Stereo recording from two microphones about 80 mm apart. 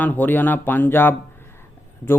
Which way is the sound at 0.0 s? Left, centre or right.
Left.